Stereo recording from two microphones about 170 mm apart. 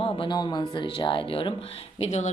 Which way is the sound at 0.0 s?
30° left (ahead or behind).